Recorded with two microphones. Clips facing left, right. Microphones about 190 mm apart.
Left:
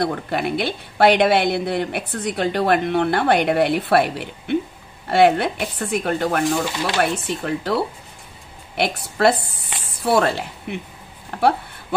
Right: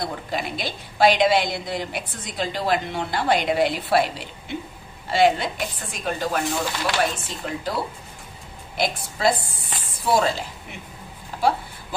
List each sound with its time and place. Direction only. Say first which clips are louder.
0.0 s a woman's voice: left 6 dB; 60° left (ahead or behind)